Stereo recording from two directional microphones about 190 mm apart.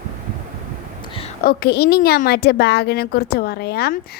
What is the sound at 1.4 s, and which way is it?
Speech, 55° left (ahead or behind).